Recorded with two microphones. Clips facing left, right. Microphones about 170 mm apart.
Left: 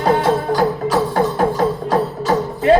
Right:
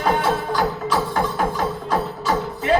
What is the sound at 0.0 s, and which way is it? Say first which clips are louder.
Music: left 5 dB; 40° left (ahead or behind).